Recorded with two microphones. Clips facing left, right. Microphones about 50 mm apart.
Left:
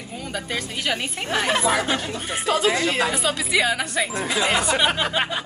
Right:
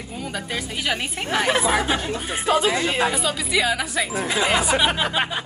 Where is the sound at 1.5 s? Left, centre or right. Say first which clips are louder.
Even; centre.